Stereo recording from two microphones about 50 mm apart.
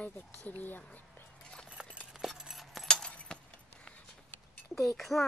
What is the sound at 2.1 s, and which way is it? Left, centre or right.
Keys jangling, centre.